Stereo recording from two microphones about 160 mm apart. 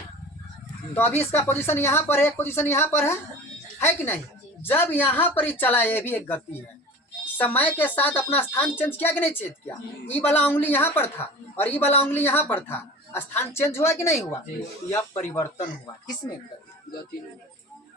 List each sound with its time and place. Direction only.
0.9 s a woman's voice: 15° left (ahead or behind)